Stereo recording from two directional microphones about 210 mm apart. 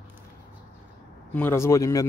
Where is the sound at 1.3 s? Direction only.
10° left (ahead or behind).